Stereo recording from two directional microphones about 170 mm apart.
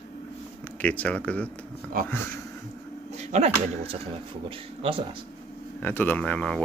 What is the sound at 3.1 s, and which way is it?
Speech, 40° right (ahead or behind).